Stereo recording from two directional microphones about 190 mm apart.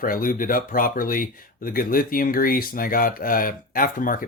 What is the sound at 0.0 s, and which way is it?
Speech, 45° left (ahead or behind).